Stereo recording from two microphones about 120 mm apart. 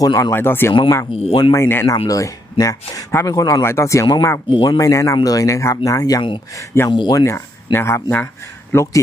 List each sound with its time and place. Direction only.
0.0 s speech: 30° left (ahead or behind)
1.1 s speech: 55° left (ahead or behind)
1.5 s speech: 20° left (ahead or behind)
4.4 s speech: 45° left (ahead or behind)
4.8 s speech: 25° left (ahead or behind)